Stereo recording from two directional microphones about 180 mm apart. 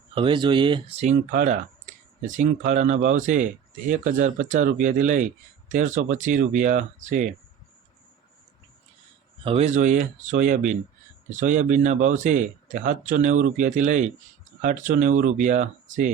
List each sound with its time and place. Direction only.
0.1 s speech: 30° right (ahead or behind)
1.3 s speech: 50° right (ahead or behind)
9.4 s speech: 35° right (ahead or behind)